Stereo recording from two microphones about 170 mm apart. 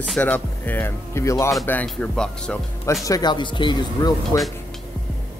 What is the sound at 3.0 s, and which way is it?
Speech, 25° left (ahead or behind).